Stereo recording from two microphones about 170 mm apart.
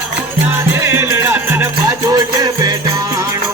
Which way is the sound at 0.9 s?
15° right (ahead or behind).